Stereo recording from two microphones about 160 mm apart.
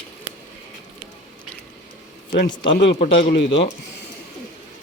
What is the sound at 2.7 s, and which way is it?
Speech, 90° left.